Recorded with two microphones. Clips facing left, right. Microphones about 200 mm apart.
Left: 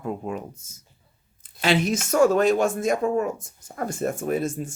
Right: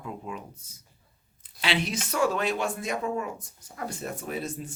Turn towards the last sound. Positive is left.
turn(degrees=45)  # may be behind; listen again after turning